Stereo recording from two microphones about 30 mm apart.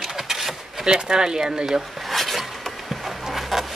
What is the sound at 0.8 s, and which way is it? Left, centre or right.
Speech, right.